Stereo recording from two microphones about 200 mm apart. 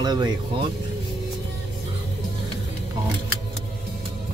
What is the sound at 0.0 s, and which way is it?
Speech, 20° right (ahead or behind).